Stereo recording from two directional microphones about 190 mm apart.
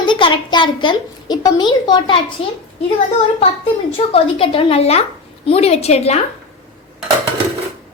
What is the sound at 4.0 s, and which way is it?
A woman's voice, 30° left (ahead or behind).